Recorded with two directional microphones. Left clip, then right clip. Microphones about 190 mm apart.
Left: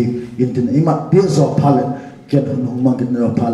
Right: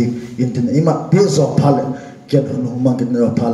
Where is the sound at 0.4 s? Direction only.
55° right (ahead or behind).